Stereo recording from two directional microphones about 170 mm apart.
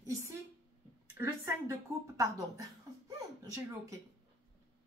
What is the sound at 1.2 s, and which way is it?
Speech, 15° right (ahead or behind).